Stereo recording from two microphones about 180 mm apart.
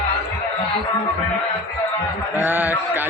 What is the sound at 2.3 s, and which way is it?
Speech, 10° right (ahead or behind).